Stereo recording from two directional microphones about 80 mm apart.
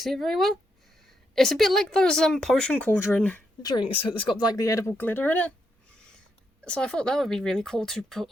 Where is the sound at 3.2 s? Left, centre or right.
Centre.